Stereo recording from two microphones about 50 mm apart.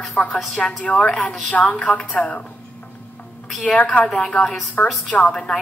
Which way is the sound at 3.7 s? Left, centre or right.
Left.